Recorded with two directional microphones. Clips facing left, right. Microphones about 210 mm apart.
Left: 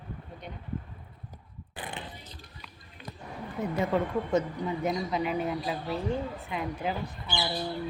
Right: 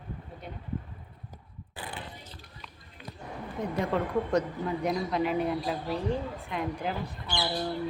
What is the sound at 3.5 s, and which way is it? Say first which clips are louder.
A woman's voice: left 1 dB; 5° left (ahead or behind).